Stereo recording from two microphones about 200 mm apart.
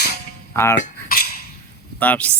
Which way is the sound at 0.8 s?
45° left (ahead or behind).